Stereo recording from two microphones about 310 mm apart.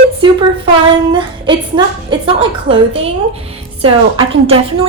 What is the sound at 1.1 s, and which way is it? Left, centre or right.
A woman's voice, centre.